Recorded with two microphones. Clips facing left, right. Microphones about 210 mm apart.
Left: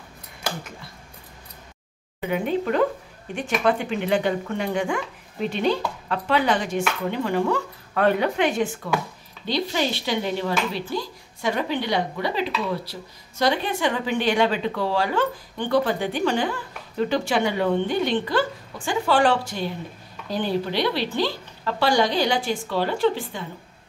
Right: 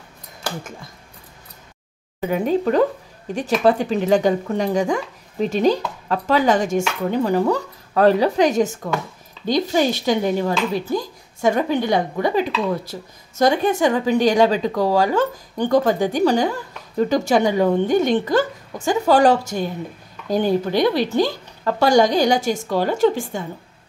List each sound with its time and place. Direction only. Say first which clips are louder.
2.1 s speech: right 4 dB; 40° right (ahead or behind)